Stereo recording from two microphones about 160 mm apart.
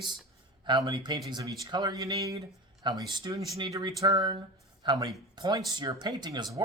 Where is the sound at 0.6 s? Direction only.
30° right (ahead or behind).